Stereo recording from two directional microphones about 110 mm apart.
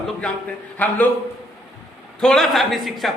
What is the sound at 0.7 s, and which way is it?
Speech, 15° left (ahead or behind).